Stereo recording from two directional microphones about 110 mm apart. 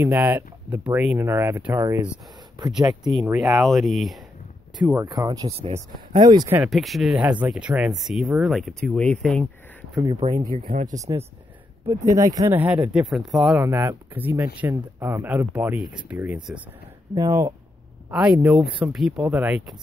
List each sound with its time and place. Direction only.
0.0 s speech: 15° right (ahead or behind)
3.0 s speech: centre (ahead or behind)
4.9 s speech: 35° right (ahead or behind)
6.6 s speech: centre (ahead or behind)
7.2 s speech: 10° right (ahead or behind); by 9.8 s 10° left (ahead or behind)
10.2 s speech: 60° right (ahead or behind)
11.0 s speech: 30° right (ahead or behind)
12.5 s speech: 10° right (ahead or behind)
12.9 s speech: centre (ahead or behind)
13.6 s speech: 25° right (ahead or behind)
17.1 s speech: 25° right (ahead or behind)
18.1 s speech: 10° right (ahead or behind)